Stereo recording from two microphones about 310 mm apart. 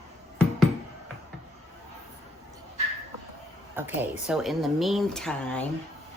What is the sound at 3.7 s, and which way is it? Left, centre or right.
Speech, centre.